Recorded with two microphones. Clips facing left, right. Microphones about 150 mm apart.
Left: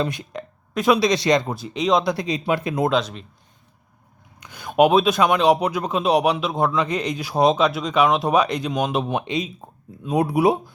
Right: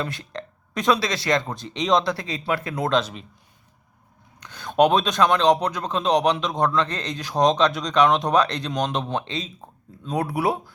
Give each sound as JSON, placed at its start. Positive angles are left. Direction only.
{"t": 0.0, "sound": "a sound", "side_deg": 10}
{"t": 0.9, "sound": "speech", "side_deg": 20}
{"t": 1.5, "sound": "speech", "side_deg": 5}
{"t": 2.9, "sound": "a man's voice", "side_deg": 0}
{"t": 4.4, "sound": "speech", "side_deg": 10}